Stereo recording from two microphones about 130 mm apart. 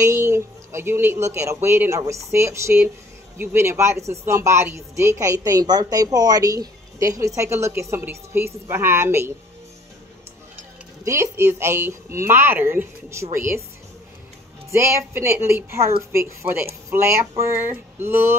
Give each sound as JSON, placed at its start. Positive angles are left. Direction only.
{"t": 0.0, "sound": "speech", "side_deg": -20}
{"t": 11.1, "sound": "speech", "side_deg": -20}
{"t": 14.7, "sound": "speech", "side_deg": -20}